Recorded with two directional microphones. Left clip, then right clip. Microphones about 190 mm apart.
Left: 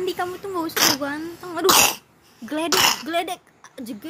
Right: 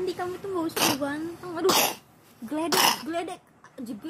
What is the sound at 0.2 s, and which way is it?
Speech, 35° left (ahead or behind).